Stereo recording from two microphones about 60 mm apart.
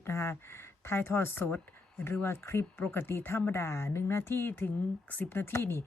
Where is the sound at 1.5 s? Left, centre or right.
Left.